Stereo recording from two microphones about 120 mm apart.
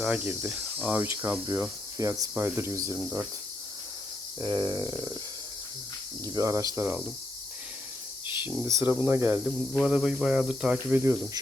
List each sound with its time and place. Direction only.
0.0 s cricket: 10° right (ahead or behind)
0.5 s speech: 10° right (ahead or behind)
2.0 s cricket: 25° right (ahead or behind)
4.4 s a sound: 35° right (ahead or behind)
6.2 s cricket: 30° right (ahead or behind)
6.7 s speech: 15° right (ahead or behind)
8.6 s cricket: 25° right (ahead or behind)
9.5 s speech: 5° right (ahead or behind)